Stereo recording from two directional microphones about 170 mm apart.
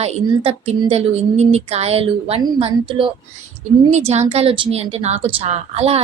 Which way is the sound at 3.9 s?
40° right (ahead or behind).